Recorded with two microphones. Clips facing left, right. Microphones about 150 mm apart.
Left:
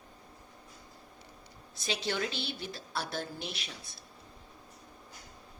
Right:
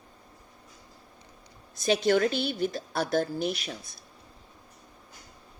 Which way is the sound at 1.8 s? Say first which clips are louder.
Right 11 dB; 50° right (ahead or behind).